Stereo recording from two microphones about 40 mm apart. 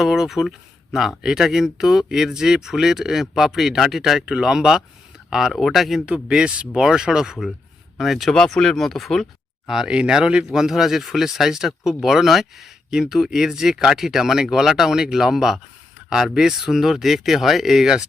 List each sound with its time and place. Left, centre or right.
0.0 s speech: centre
4.3 s speech: centre
5.5 s speech: centre
6.7 s speech: centre
7.9 s speech: centre
8.3 s speech: centre
9.8 s speech: right; by 17.9 s centre